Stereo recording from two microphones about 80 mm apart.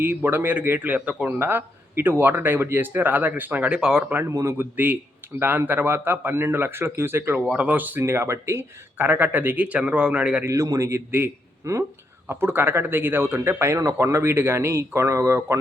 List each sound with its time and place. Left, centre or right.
0.0 s speech: right
4.3 s speech: right
4.5 s speech: right
7.4 s speech: centre
8.0 s speech: right; by 10.4 s centre
10.4 s speech: right
12.3 s speech: right